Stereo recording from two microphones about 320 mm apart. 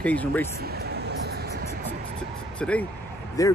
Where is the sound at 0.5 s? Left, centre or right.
Right.